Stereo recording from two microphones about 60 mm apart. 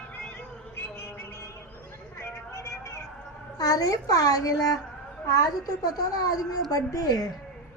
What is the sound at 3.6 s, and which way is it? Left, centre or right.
A child's voice, left.